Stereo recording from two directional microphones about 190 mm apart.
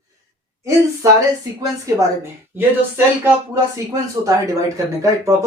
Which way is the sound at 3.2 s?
15° right (ahead or behind).